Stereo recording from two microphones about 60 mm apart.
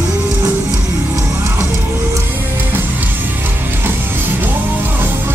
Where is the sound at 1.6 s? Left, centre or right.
Right.